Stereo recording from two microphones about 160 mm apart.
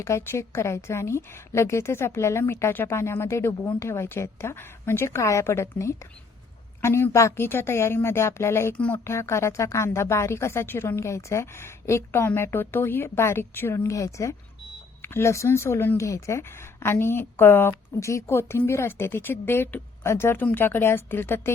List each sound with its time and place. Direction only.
0.0 s a woman's voice: 15° left (ahead or behind)